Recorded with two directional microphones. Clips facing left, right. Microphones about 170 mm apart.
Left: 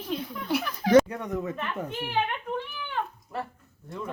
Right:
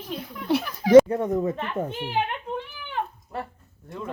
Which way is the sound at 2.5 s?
20° right (ahead or behind).